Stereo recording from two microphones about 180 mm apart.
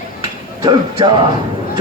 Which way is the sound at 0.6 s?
25° right (ahead or behind).